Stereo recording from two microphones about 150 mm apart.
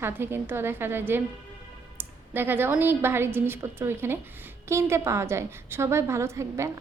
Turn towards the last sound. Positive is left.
turn(degrees=-20)  # may be behind; listen again after turning